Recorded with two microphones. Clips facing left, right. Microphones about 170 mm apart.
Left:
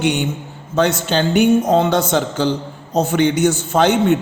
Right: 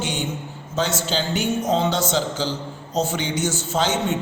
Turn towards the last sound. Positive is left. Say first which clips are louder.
# left 8 dB
turn(degrees=60)  # may be behind; listen again after turning